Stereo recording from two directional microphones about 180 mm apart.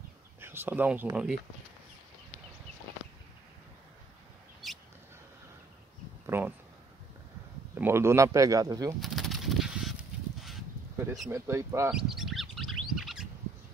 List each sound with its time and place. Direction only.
0.4 s speech: 10° right (ahead or behind)
4.6 s mouse: centre (ahead or behind)
6.2 s speech: 10° right (ahead or behind)
7.7 s speech: 15° right (ahead or behind)
9.0 s bird: centre (ahead or behind)
11.2 s speech: 15° right (ahead or behind)
11.9 s bird: centre (ahead or behind)